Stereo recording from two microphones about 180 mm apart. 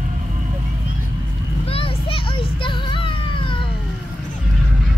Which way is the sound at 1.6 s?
30° left (ahead or behind).